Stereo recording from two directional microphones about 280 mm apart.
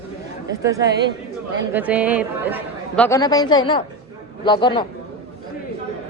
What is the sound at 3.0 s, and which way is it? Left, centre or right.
Speech, centre.